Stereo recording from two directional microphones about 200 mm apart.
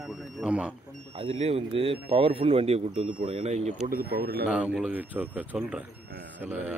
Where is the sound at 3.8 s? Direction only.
45° right (ahead or behind).